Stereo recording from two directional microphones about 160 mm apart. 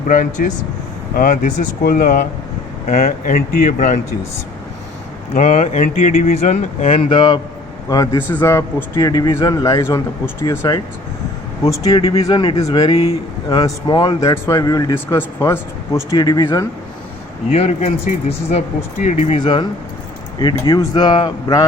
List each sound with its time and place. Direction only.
0.1 s speech: 50° left (ahead or behind)
1.8 s speech: 65° left (ahead or behind)
5.3 s speech: 50° left (ahead or behind)
6.4 s speech: 45° left (ahead or behind); by 10.8 s 20° left (ahead or behind)
11.9 s speech: 35° left (ahead or behind)
12.8 s speech: 35° left (ahead or behind)
13.6 s speech: 25° left (ahead or behind)
16.0 s speech: 25° left (ahead or behind)
17.5 s speech: 45° left (ahead or behind)
19.4 s speech: 30° left (ahead or behind)